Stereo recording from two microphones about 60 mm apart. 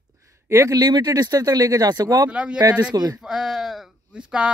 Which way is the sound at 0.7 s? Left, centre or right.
Right.